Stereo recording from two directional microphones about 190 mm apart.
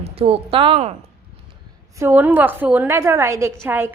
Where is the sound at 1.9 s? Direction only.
10° right (ahead or behind).